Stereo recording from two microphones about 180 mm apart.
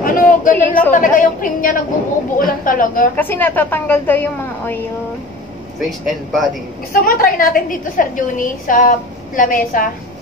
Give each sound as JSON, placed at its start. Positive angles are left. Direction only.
{"t": 0.0, "sound": "a sound", "side_deg": 50}
{"t": 0.9, "sound": "a woman's voice", "side_deg": 50}
{"t": 3.2, "sound": "a woman's voice", "side_deg": 10}
{"t": 5.8, "sound": "speech", "side_deg": 0}
{"t": 6.9, "sound": "a woman's voice", "side_deg": 55}